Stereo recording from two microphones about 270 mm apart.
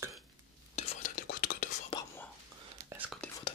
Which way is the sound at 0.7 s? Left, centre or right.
Left.